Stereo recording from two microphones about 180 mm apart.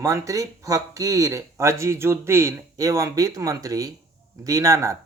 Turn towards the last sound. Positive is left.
turn(degrees=-15)  # may be behind; listen again after turning